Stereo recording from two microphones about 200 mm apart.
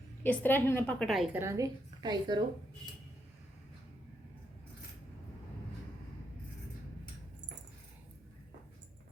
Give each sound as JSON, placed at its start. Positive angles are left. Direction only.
{"t": 0.2, "sound": "a woman's voice", "side_deg": 10}
{"t": 1.4, "sound": "a woman's voice", "side_deg": -15}